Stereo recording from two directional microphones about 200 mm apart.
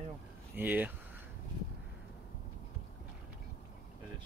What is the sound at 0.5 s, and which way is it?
Speech, 10° right (ahead or behind).